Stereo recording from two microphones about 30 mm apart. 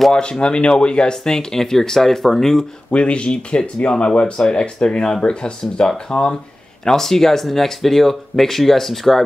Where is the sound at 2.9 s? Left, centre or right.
Left.